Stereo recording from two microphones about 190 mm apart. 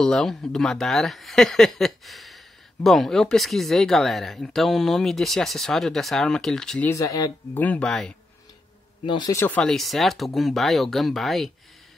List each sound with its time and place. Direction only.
0.0 s speech: centre (ahead or behind)
6.9 s speech: 15° left (ahead or behind)
7.5 s speech: 10° left (ahead or behind)
9.0 s speech: 20° left (ahead or behind); by 11.5 s centre (ahead or behind)